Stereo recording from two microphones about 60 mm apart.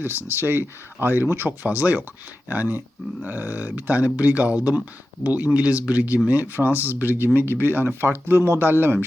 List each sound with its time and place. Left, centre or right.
0.3 s speech: right